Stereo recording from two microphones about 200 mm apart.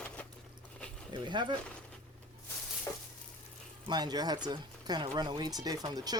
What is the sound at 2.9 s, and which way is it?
Sizzle, 15° left (ahead or behind).